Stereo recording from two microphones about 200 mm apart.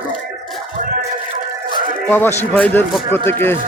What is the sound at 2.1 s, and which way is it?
A man's voice, 10° left (ahead or behind).